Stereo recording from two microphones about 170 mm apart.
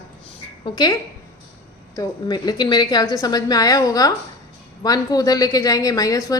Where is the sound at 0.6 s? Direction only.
25° left (ahead or behind).